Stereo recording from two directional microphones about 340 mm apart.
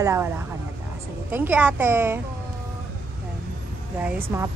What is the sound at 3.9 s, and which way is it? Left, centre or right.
Speech, centre.